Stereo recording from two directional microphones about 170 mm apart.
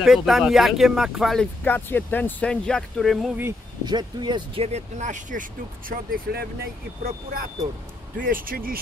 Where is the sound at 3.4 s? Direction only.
20° right (ahead or behind); by 5.4 s 45° right (ahead or behind).